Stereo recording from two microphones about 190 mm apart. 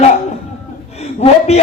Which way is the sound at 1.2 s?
35° left (ahead or behind).